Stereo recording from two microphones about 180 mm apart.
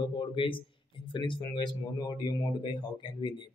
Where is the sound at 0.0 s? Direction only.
25° left (ahead or behind).